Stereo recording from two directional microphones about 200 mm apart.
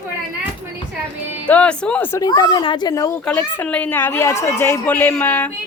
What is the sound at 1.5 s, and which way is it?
A woman's voice, 5° left (ahead or behind).